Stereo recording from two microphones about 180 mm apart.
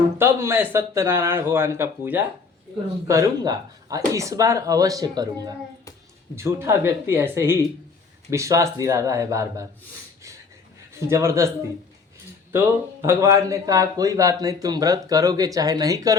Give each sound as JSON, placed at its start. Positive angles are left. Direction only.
{"t": 0.2, "sound": "a man's voice", "side_deg": -15}
{"t": 11.1, "sound": "a man's voice", "side_deg": -15}